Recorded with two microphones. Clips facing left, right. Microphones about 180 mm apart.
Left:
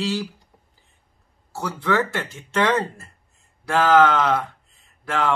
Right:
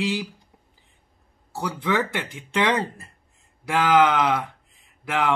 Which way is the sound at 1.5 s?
15° right (ahead or behind).